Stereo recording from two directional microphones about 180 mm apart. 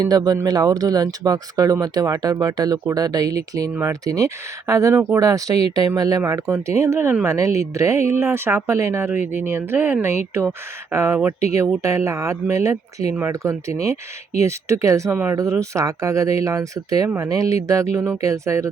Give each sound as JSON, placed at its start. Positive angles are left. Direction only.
{"t": 0.0, "sound": "speech", "side_deg": -20}